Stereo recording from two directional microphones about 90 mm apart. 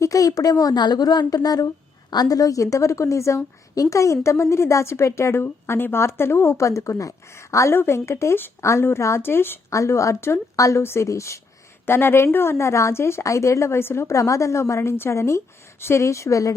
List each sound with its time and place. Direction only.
0.0 s a woman's voice: 40° left (ahead or behind)
9.7 s a woman's voice: 35° left (ahead or behind)